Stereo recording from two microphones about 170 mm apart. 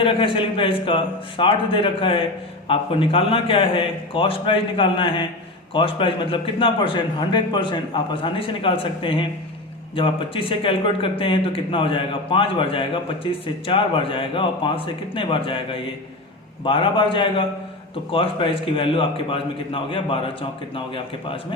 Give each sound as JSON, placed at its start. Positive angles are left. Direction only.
{"t": 0.0, "sound": "a man's voice", "side_deg": 30}